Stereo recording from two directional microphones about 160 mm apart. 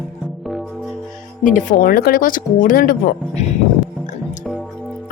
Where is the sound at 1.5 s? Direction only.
55° left (ahead or behind).